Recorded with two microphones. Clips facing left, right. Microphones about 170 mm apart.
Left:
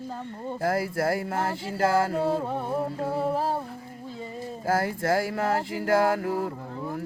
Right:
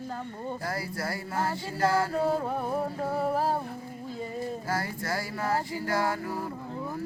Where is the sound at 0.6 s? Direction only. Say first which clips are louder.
Left 12 dB; 50° left (ahead or behind).